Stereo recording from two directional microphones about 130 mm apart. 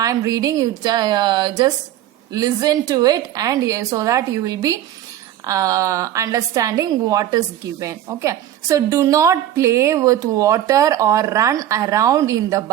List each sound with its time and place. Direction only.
0.0 s a woman's voice: 25° right (ahead or behind)